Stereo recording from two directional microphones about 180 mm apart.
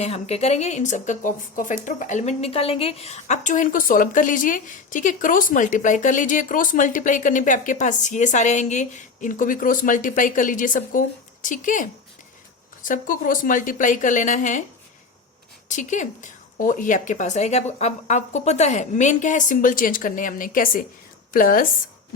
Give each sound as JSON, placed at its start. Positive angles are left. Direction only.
{"t": 0.0, "sound": "a woman's voice", "side_deg": 35}
{"t": 15.7, "sound": "a woman's voice", "side_deg": 45}